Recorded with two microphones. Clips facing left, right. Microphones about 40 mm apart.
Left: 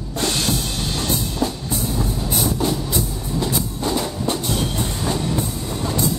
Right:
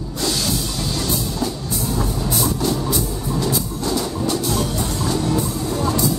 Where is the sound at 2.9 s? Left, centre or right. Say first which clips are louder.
Right 2 dB; left.